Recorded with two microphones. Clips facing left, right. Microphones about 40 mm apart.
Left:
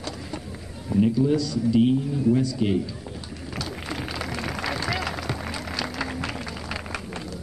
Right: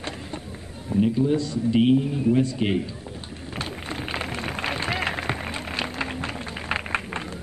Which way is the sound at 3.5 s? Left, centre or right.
Right.